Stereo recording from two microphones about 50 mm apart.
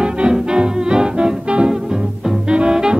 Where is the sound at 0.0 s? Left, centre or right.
Centre.